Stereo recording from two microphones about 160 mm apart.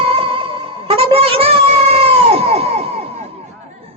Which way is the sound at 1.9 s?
40° right (ahead or behind).